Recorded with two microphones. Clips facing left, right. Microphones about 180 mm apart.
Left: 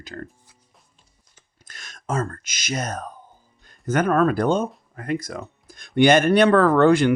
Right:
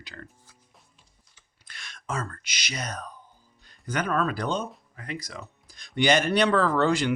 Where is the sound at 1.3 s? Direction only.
45° left (ahead or behind).